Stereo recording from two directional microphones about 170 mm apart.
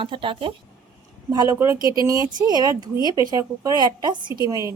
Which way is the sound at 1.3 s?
20° right (ahead or behind).